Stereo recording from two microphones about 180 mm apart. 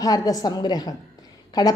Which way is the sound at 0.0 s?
20° left (ahead or behind).